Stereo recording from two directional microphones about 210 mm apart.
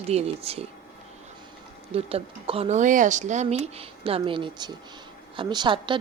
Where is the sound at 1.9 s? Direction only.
25° right (ahead or behind).